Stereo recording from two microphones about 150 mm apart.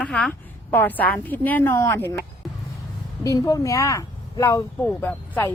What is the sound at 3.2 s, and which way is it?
A woman's voice, 20° left (ahead or behind).